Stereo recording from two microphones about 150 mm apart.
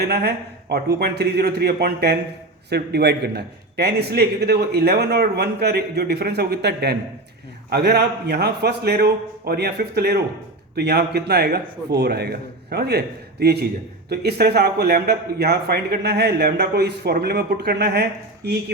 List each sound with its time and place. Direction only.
0.0 s speech: 90° right